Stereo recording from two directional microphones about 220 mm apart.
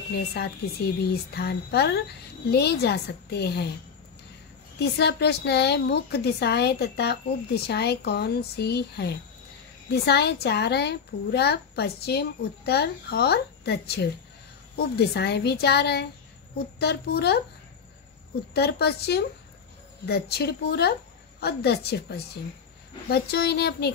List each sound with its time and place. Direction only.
0.3 s a woman's voice: 50° left (ahead or behind)
4.7 s a woman's voice: 50° left (ahead or behind)
18.5 s a woman's voice: 45° left (ahead or behind)